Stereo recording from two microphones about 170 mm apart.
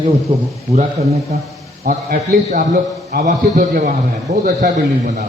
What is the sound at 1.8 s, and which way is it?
A man's voice, 55° right (ahead or behind).